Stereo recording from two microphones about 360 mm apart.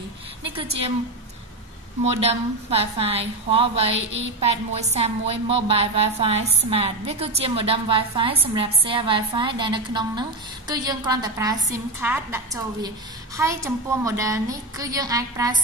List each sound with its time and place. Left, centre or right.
0.6 s a woman's voice: centre
2.1 s a woman's voice: centre
3.9 s a woman's voice: right
4.4 s a woman's voice: centre
13.4 s a woman's voice: centre